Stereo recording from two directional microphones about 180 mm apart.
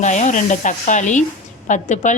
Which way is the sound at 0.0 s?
40° left (ahead or behind).